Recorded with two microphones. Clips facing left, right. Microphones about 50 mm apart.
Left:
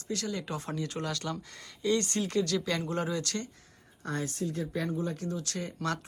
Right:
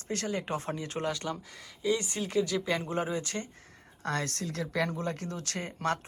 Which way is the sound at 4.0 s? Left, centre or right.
Right.